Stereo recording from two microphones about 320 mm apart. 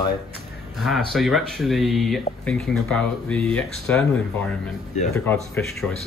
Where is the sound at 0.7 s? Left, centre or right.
Centre.